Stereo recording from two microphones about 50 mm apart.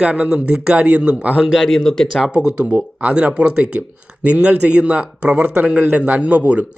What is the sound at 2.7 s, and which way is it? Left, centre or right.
Speech, right.